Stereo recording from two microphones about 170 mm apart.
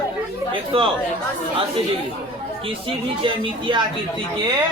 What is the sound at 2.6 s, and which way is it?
A man's voice, 30° right (ahead or behind).